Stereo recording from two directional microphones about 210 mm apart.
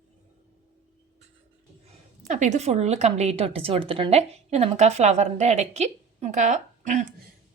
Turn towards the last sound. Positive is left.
turn(degrees=-35)  # may be behind; listen again after turning